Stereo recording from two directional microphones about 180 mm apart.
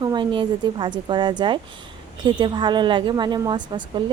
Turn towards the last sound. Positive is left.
turn(degrees=-25)  # may be behind; listen again after turning